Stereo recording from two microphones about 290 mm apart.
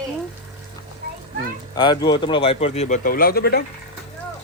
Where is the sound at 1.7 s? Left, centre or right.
Centre; by 3.7 s left.